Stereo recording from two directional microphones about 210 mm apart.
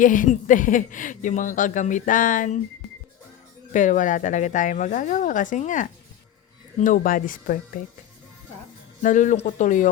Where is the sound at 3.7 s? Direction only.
35° left (ahead or behind).